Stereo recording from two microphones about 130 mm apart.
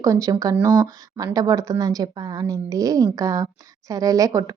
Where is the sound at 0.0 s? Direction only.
25° right (ahead or behind).